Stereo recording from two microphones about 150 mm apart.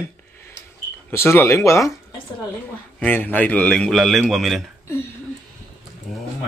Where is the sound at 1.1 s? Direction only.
15° left (ahead or behind).